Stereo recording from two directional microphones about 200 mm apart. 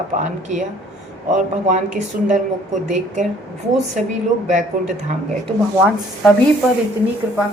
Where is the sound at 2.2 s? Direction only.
35° right (ahead or behind).